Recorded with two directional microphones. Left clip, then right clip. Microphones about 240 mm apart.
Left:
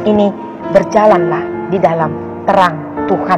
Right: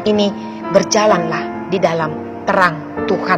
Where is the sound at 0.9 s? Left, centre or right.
Right.